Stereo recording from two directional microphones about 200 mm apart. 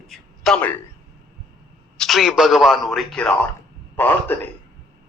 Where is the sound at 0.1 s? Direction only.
5° left (ahead or behind).